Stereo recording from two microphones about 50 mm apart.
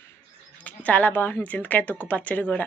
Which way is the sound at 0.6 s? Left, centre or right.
Left.